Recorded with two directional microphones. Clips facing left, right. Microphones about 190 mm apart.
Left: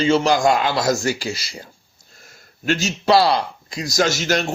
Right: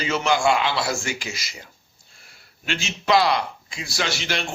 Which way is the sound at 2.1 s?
45° left (ahead or behind).